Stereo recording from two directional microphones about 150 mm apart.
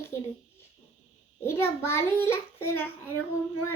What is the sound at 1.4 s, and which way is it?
Child singing, 20° left (ahead or behind).